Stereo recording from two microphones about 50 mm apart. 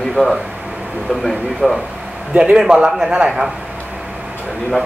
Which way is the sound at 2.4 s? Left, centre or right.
Centre.